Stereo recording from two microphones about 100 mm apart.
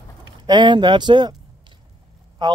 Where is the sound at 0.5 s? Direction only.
50° right (ahead or behind).